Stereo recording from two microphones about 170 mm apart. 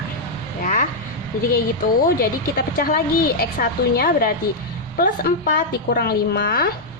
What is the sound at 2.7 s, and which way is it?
A woman's voice, 60° left (ahead or behind).